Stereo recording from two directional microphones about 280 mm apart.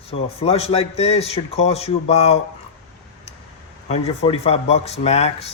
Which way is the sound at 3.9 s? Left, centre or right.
Left.